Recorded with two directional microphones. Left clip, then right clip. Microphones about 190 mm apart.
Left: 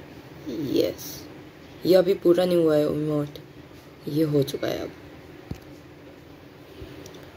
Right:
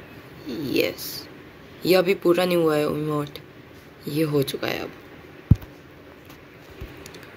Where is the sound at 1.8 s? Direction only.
5° right (ahead or behind).